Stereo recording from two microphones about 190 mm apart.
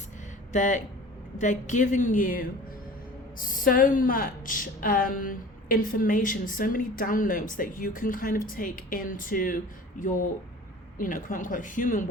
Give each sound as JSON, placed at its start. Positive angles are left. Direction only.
{"t": 0.5, "sound": "a woman's voice", "side_deg": 40}